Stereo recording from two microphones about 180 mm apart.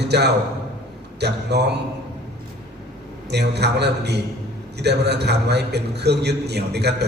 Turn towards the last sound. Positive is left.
turn(degrees=-65)  # may be behind; listen again after turning